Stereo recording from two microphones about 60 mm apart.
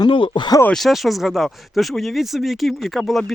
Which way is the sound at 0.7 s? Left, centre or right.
Centre.